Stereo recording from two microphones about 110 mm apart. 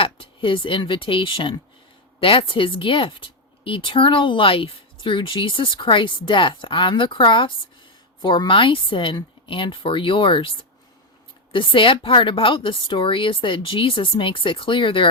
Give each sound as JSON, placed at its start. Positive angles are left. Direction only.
{"t": 0.0, "sound": "speech", "side_deg": 55}